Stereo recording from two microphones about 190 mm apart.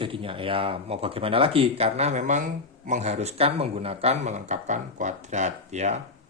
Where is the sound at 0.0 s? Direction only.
30° right (ahead or behind).